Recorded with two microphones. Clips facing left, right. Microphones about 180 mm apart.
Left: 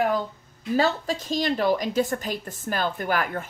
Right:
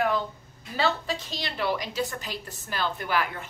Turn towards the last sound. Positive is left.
turn(degrees=45)  # may be behind; listen again after turning